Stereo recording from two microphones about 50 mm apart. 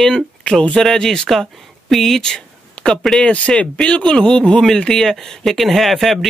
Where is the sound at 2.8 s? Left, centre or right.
Left.